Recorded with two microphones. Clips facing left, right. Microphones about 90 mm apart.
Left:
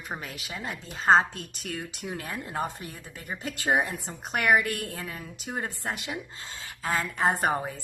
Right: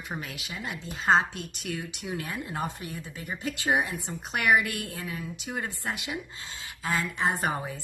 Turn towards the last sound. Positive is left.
turn(degrees=40)  # may be behind; listen again after turning